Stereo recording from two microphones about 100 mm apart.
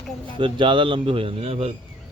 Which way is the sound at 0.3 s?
55° right (ahead or behind).